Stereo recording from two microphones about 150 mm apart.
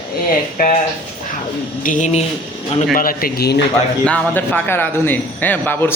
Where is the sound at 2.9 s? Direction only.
75° left (ahead or behind).